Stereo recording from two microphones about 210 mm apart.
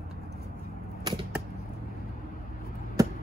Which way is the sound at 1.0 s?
20° right (ahead or behind).